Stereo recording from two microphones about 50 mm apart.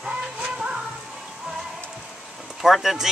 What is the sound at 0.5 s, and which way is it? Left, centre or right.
Music, centre.